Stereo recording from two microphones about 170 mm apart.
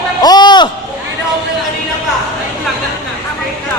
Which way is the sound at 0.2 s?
25° left (ahead or behind).